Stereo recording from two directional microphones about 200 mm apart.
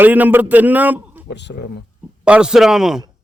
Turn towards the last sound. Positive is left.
turn(degrees=0)  # may be behind; listen again after turning